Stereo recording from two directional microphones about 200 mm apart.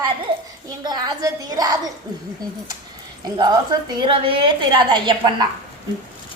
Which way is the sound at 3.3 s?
20° right (ahead or behind).